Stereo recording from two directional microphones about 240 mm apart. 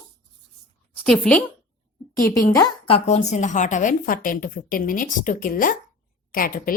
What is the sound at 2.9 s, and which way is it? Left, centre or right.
A woman's voice, left.